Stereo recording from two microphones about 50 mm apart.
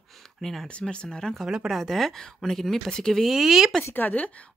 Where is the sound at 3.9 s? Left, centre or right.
Left.